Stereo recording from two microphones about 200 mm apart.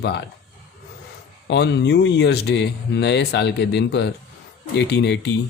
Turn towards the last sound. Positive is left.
turn(degrees=60)  # may be behind; listen again after turning